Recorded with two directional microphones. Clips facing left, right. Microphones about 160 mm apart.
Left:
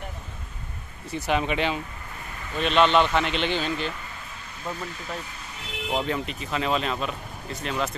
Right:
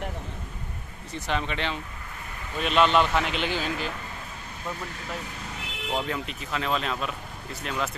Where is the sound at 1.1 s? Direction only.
10° left (ahead or behind).